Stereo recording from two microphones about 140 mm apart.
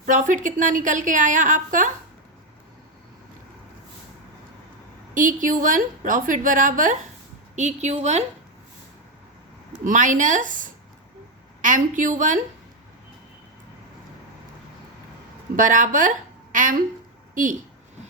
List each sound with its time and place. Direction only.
0.0 s a woman's voice: 65° right (ahead or behind)
5.1 s a woman's voice: 70° right (ahead or behind)
7.5 s a woman's voice: 55° right (ahead or behind)
9.8 s a woman's voice: 65° right (ahead or behind)
15.5 s a woman's voice: 70° right (ahead or behind)